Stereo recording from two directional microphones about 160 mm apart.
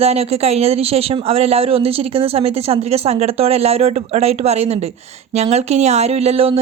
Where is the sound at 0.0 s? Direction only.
40° right (ahead or behind).